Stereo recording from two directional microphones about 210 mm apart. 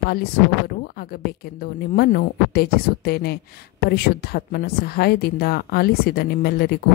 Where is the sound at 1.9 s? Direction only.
45° left (ahead or behind).